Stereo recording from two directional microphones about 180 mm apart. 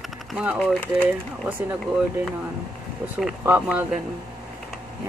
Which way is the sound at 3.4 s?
10° right (ahead or behind).